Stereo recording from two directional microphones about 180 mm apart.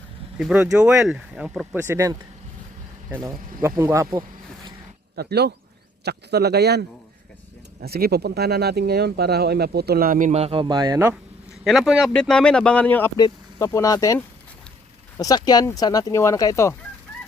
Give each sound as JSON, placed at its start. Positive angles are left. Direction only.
{"t": 0.3, "sound": "speech", "side_deg": 0}
{"t": 0.6, "sound": "speech", "side_deg": -15}
{"t": 1.0, "sound": "speech", "side_deg": -5}
{"t": 3.8, "sound": "a sound", "side_deg": -15}
{"t": 5.1, "sound": "speech", "side_deg": -65}
{"t": 11.6, "sound": "a man's voice", "side_deg": 0}
{"t": 13.1, "sound": "speech", "side_deg": 20}